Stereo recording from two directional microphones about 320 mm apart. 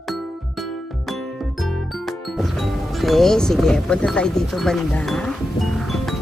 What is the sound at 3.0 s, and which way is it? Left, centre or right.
Speech, centre.